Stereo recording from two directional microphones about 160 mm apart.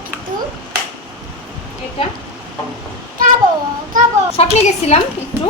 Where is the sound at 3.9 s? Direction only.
55° right (ahead or behind).